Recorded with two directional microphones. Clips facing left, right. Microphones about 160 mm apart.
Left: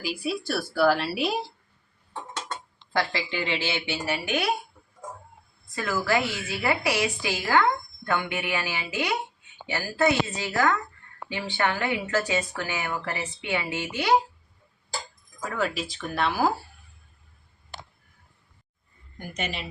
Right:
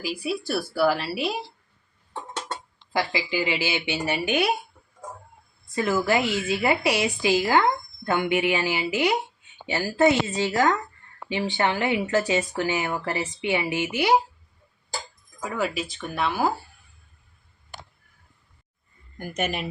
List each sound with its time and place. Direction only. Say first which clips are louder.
0.0 s speech: right 1 dB; centre (ahead or behind)
3.0 s a woman's voice: right 3 dB; 5° right (ahead or behind)
5.7 s a woman's voice: right 3 dB; 20° right (ahead or behind)
15.4 s speech: right 1 dB; 5° right (ahead or behind)
19.4 s a woman's voice: right 5 dB; 50° right (ahead or behind)